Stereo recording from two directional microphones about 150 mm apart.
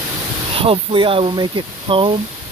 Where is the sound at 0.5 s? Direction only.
40° right (ahead or behind).